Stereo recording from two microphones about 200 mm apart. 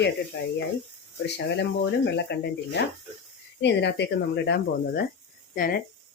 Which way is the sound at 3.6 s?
60° left (ahead or behind).